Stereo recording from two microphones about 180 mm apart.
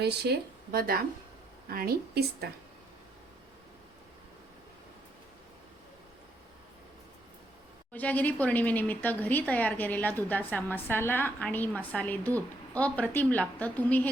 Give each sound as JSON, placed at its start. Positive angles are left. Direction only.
{"t": 0.0, "sound": "speech", "side_deg": -65}
{"t": 7.9, "sound": "speech", "side_deg": 10}